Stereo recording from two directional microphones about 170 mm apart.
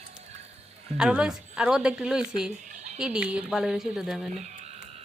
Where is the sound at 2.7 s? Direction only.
45° right (ahead or behind).